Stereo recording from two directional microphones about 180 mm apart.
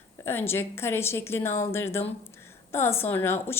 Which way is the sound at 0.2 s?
15° left (ahead or behind).